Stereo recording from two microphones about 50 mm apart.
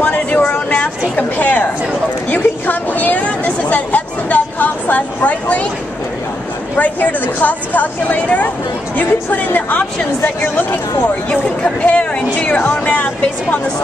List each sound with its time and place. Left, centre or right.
0.0 s a sound: left
6.8 s speech: left
9.7 s speech: left
11.8 s speech: left